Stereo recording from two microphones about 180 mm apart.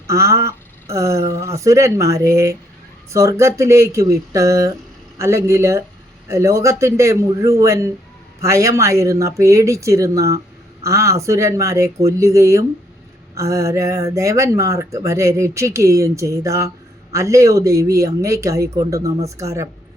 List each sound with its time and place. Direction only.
0.1 s speech: 15° right (ahead or behind)